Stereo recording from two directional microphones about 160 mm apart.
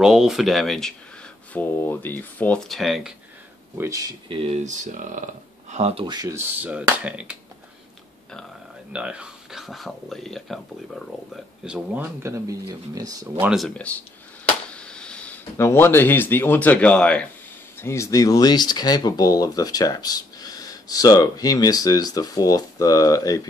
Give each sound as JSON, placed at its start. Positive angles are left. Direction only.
{"t": 0.0, "sound": "speech", "side_deg": -5}
{"t": 3.7, "sound": "speech", "side_deg": -20}
{"t": 4.3, "sound": "speech", "side_deg": -35}
{"t": 4.7, "sound": "speech", "side_deg": -50}
{"t": 6.0, "sound": "speech", "side_deg": -25}
{"t": 6.6, "sound": "speech", "side_deg": -10}
{"t": 8.9, "sound": "speech", "side_deg": -5}
{"t": 13.4, "sound": "speech", "side_deg": -5}
{"t": 13.7, "sound": "speech", "side_deg": 10}
{"t": 17.7, "sound": "speech", "side_deg": 15}